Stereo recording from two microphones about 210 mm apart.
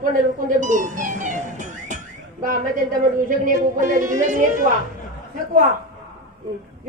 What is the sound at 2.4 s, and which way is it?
Speech, 40° right (ahead or behind).